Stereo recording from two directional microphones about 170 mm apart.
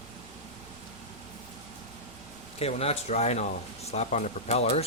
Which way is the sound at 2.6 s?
35° left (ahead or behind).